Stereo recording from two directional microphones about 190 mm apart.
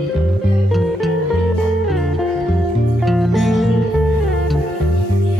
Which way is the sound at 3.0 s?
Centre (ahead or behind).